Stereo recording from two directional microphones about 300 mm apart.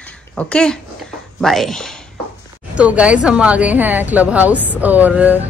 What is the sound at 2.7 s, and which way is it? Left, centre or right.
Speech, centre.